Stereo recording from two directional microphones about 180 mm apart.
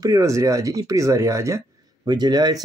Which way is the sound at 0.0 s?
20° right (ahead or behind).